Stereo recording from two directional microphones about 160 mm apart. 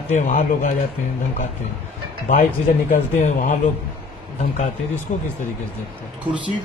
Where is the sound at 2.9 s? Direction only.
50° left (ahead or behind).